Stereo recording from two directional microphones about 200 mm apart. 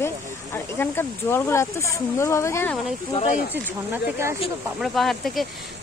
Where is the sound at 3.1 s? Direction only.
35° left (ahead or behind).